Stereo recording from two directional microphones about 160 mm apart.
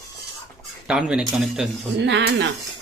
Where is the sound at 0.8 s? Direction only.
5° right (ahead or behind).